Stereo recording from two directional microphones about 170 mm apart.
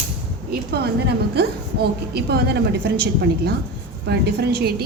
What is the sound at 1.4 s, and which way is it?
A woman's voice, 70° right (ahead or behind).